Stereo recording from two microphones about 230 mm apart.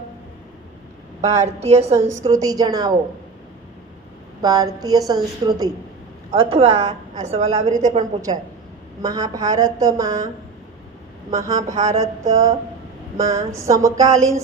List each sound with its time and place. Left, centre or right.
1.3 s a woman's voice: right
2.2 s a woman's voice: centre
4.4 s a woman's voice: centre
9.0 s a woman's voice: centre
11.3 s a woman's voice: centre